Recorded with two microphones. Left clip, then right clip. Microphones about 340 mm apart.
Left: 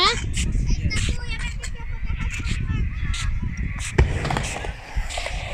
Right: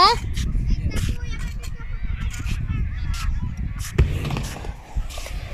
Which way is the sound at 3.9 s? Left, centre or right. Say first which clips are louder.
Left 4 dB; centre.